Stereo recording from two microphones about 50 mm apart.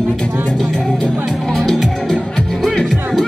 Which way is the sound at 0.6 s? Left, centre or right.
Centre.